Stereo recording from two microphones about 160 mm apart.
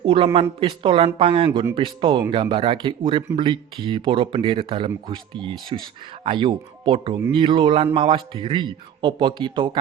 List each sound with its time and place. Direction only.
0.0 s speech: 35° right (ahead or behind)